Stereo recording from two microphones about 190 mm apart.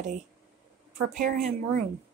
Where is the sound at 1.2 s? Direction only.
40° right (ahead or behind).